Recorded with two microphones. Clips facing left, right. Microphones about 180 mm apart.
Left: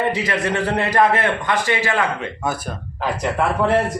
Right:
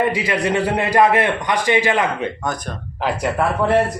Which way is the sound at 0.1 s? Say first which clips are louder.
Right 2 dB; 10° right (ahead or behind).